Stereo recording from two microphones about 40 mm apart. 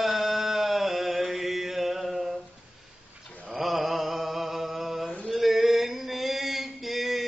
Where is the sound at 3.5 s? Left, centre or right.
Centre.